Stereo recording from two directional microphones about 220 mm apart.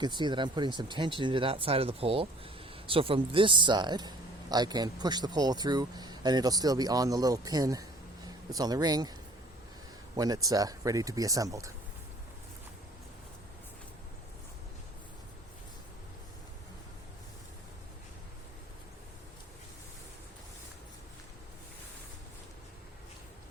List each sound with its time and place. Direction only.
0.0 s speech: 20° right (ahead or behind)
10.2 s speech: 15° right (ahead or behind)